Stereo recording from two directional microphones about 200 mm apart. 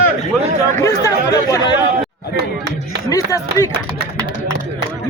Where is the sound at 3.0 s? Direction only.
15° left (ahead or behind).